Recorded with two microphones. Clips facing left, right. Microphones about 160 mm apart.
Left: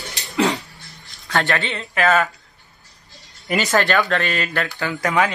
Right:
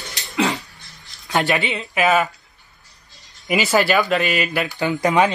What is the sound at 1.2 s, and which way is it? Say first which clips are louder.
Speech: right 2 dB; 15° right (ahead or behind).